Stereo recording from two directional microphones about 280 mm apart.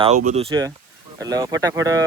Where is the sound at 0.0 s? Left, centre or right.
Right.